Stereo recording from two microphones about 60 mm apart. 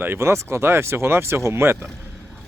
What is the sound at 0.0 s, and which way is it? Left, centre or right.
Speech, right.